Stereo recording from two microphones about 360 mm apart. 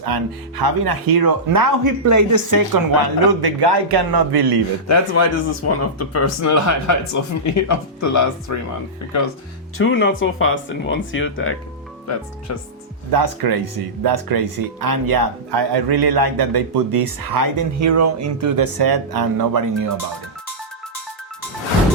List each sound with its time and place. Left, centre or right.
0.0 s speech: right
4.9 s speech: left
9.7 s speech: left
13.1 s speech: right
18.5 s speech: right